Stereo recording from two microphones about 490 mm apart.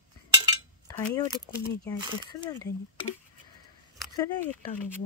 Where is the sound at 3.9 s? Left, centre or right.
Centre.